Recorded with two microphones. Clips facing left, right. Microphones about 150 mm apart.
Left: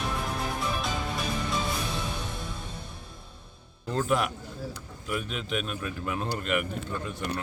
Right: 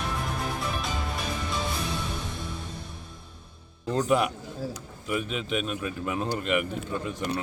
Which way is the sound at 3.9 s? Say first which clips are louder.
Right 3 dB; centre (ahead or behind).